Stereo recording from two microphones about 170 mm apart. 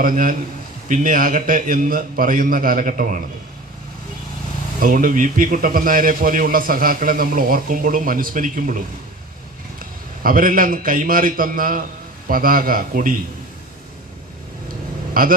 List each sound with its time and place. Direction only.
0.0 s a man's voice: 55° right (ahead or behind)
4.8 s a man's voice: 55° right (ahead or behind)
10.2 s a man's voice: 55° right (ahead or behind)
15.1 s speech: 55° right (ahead or behind)